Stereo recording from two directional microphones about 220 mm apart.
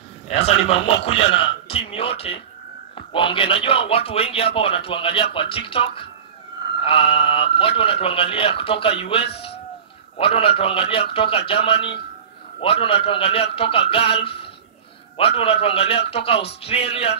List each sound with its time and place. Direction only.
0.3 s speech: 30° left (ahead or behind)